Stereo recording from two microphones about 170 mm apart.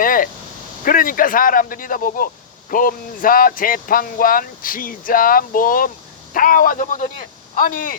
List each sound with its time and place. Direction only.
0.0 s speech: 55° left (ahead or behind)